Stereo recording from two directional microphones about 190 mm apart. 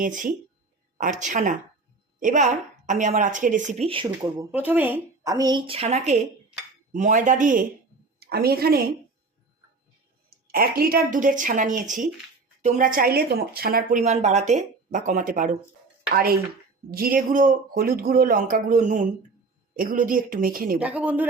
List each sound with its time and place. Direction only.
0.0 s a woman's voice: 45° right (ahead or behind)
8.2 s a woman's voice: 55° right (ahead or behind)
10.5 s speech: 50° right (ahead or behind)
14.0 s a woman's voice: 35° right (ahead or behind)
20.7 s speech: 5° right (ahead or behind)